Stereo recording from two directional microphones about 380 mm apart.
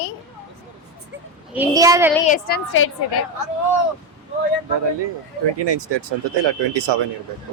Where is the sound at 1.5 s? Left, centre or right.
Centre.